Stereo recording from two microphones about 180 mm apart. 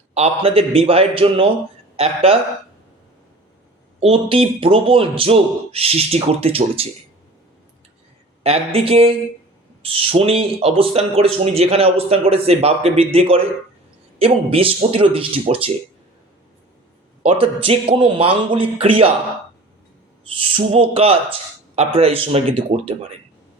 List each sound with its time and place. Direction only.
0.1 s speech: 35° right (ahead or behind)
4.0 s speech: 30° right (ahead or behind)
8.4 s speech: 35° right (ahead or behind)
17.2 s speech: 30° right (ahead or behind)
20.4 s speech: 30° right (ahead or behind)